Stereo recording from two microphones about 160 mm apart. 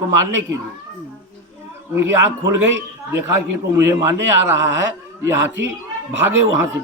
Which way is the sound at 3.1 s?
15° right (ahead or behind).